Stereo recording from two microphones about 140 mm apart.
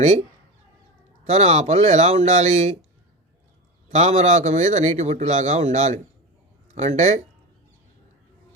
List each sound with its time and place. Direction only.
1.2 s a man's voice: 55° right (ahead or behind)
3.8 s a man's voice: 55° right (ahead or behind)